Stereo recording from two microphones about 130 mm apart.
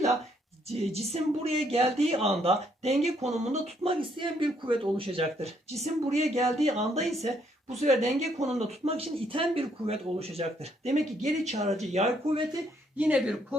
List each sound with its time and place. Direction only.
0.7 s speech: 50° right (ahead or behind)
13.0 s speech: 10° right (ahead or behind)